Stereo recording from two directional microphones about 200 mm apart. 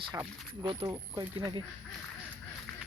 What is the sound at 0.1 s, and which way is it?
Speech, 20° right (ahead or behind).